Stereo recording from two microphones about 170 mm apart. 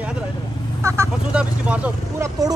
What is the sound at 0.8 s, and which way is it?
Speech, 15° right (ahead or behind).